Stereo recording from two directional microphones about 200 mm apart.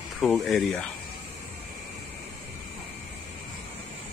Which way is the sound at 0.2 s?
Centre (ahead or behind).